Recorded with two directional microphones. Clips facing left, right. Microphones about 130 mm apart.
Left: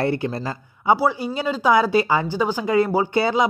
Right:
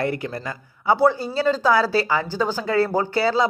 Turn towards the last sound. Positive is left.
turn(degrees=20)  # may be behind; listen again after turning